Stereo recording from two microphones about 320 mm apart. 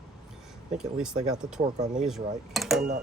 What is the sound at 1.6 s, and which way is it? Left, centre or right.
Speech, centre.